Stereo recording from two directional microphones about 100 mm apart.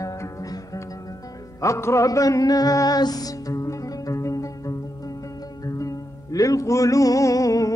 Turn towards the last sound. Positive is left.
turn(degrees=35)  # may be behind; listen again after turning